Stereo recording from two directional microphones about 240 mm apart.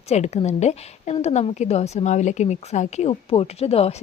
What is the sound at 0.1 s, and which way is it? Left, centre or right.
A woman's voice, left.